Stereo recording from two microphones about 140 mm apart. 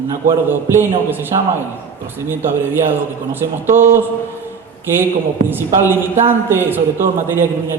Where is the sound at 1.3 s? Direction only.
30° right (ahead or behind).